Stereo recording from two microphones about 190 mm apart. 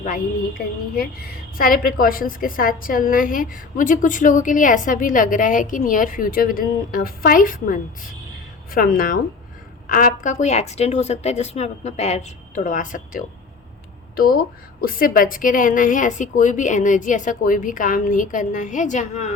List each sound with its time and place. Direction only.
0.9 s a woman's voice: 50° left (ahead or behind)